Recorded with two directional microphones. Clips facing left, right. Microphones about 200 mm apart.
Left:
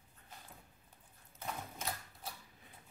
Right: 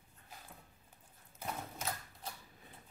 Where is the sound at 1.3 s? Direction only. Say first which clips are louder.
Right 1 dB; centre (ahead or behind).